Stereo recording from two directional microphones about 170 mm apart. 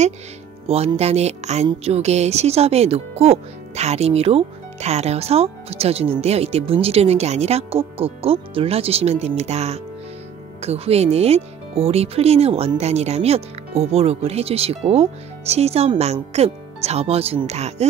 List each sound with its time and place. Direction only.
0.7 s speech: 35° right (ahead or behind)